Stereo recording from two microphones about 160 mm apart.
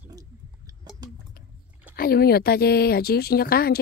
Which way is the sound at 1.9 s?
70° left (ahead or behind).